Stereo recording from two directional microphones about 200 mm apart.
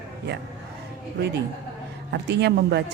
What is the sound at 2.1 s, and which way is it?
Speech, 55° right (ahead or behind).